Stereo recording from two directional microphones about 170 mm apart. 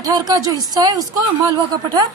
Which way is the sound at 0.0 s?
25° right (ahead or behind).